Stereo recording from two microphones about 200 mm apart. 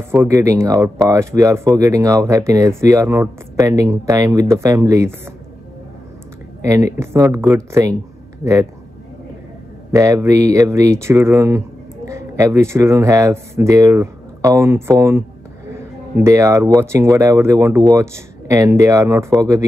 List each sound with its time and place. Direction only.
0.0 s speech: 10° right (ahead or behind)
6.6 s speech: 15° right (ahead or behind)
9.9 s speech: 15° right (ahead or behind)